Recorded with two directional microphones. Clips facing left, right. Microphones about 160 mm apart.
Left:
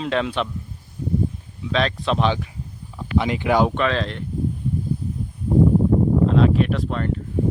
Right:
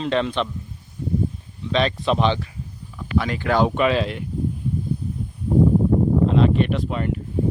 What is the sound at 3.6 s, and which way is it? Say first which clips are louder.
Speech: right 2 dB; 10° right (ahead or behind).